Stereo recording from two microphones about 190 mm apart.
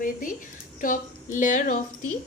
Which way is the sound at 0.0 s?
45° left (ahead or behind).